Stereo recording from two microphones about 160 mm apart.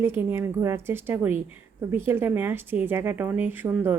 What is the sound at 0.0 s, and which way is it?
A woman's voice, 15° right (ahead or behind).